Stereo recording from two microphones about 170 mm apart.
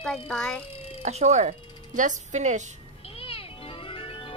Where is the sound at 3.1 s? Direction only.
35° left (ahead or behind).